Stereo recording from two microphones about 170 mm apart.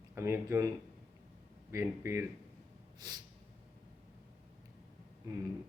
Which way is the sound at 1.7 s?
15° right (ahead or behind).